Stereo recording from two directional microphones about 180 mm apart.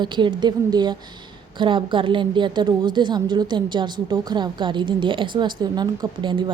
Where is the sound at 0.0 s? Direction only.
25° right (ahead or behind).